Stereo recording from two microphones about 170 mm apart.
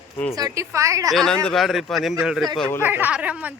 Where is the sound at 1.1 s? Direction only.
5° left (ahead or behind).